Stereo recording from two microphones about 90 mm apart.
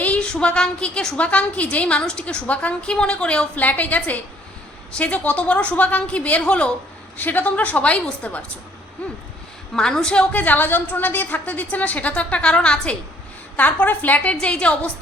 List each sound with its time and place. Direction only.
0.0 s a woman's voice: 15° left (ahead or behind)
9.7 s a woman's voice: 5° left (ahead or behind)